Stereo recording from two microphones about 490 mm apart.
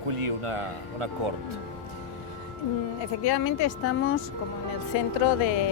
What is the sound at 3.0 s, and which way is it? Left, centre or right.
Speech, left.